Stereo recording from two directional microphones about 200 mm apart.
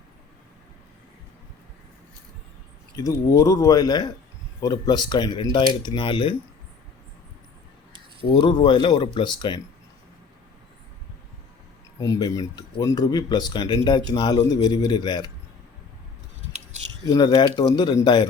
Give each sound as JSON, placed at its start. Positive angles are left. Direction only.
{"t": 2.9, "sound": "speech", "side_deg": 15}
{"t": 8.3, "sound": "speech", "side_deg": 20}
{"t": 11.9, "sound": "speech", "side_deg": 15}
{"t": 17.1, "sound": "speech", "side_deg": 20}